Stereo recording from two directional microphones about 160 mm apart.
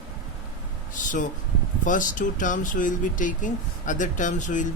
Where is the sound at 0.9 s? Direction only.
55° left (ahead or behind).